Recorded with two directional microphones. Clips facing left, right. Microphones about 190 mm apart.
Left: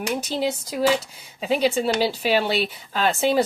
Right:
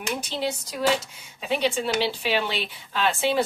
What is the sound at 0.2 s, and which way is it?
Speech, 40° left (ahead or behind).